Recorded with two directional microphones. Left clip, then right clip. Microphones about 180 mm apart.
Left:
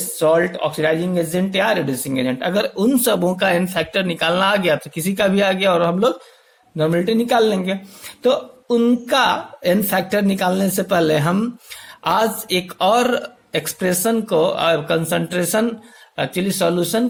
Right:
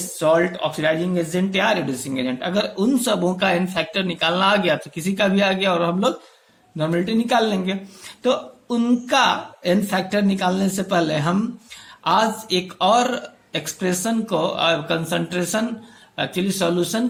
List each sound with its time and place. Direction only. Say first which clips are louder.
0.2 s speech: left 2 dB; 35° left (ahead or behind)